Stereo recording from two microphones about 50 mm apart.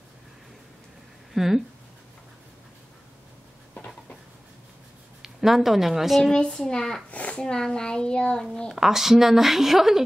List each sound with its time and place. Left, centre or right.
1.3 s speech: centre
5.2 s speech: centre
6.3 s a child's voice: centre
7.1 s a sound: left
7.3 s a child's voice: centre
8.7 s speech: centre